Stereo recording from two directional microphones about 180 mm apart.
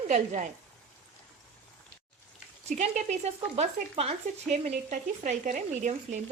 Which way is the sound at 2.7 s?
40° right (ahead or behind).